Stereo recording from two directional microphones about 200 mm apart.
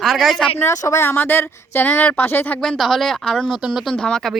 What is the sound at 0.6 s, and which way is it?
Speech, 15° left (ahead or behind).